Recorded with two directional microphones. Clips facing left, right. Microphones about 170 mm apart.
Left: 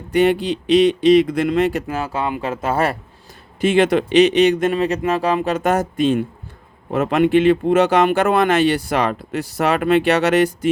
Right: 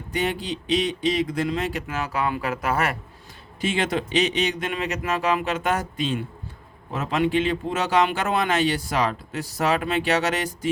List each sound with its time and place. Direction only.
0.1 s speech: 65° left (ahead or behind)
1.9 s speech: 30° left (ahead or behind)
3.6 s speech: 60° left (ahead or behind)
4.7 s speech: 30° left (ahead or behind); by 10.7 s 60° left (ahead or behind)